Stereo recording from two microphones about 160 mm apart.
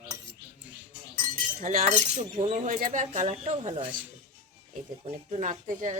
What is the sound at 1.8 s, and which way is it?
Speech, 40° right (ahead or behind).